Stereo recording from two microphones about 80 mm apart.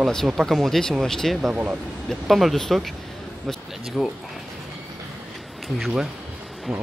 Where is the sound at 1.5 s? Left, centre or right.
Centre.